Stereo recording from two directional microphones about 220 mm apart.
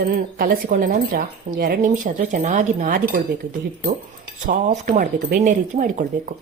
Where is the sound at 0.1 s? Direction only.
40° right (ahead or behind).